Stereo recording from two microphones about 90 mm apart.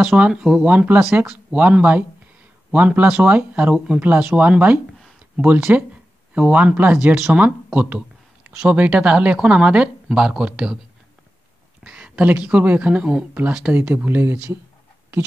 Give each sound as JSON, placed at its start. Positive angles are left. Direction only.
{"t": 0.0, "sound": "speech", "side_deg": -20}
{"t": 0.3, "sound": "speech", "side_deg": -10}
{"t": 11.8, "sound": "speech", "side_deg": -15}